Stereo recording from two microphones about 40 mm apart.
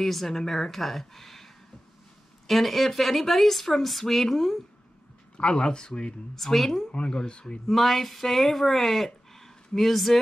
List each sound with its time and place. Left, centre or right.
0.0 s a woman's voice: centre
5.4 s speech: left
6.3 s a woman's voice: centre
6.9 s speech: left
7.6 s speech: centre